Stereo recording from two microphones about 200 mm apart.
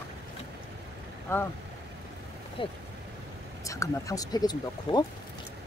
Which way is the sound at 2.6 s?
25° left (ahead or behind).